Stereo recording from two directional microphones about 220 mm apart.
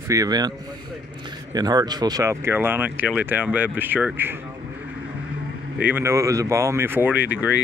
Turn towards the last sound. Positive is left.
turn(degrees=-5)  # may be behind; listen again after turning